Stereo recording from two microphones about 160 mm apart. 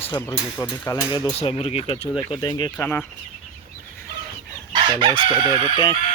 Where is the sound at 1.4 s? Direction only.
40° left (ahead or behind).